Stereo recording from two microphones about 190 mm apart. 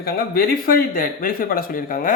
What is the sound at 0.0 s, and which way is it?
Speech, 50° left (ahead or behind).